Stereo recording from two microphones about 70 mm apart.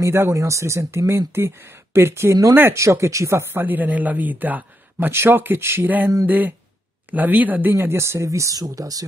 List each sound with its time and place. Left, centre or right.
0.0 s speech: right
3.6 s a man's voice: right
5.9 s a man's voice: right